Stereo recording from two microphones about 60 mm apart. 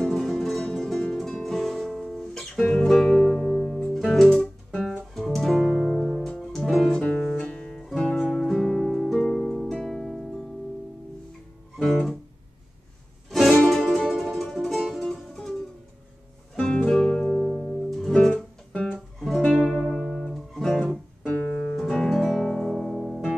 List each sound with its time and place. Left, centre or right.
0.0 s music: centre
3.9 s music: centre
7.1 s music: centre
11.8 s guitar: centre
13.7 s music: centre
16.5 s music: centre
18.3 s music: left
19.1 s music: centre
21.3 s music: left
21.7 s music: centre